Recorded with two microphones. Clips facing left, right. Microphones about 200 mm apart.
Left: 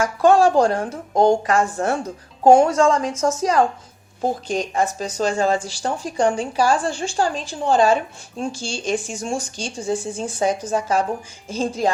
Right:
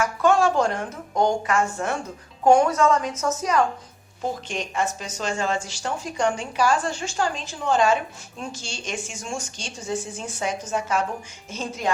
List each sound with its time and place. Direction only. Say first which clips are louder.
0.0 s speech: left 5 dB; 35° left (ahead or behind)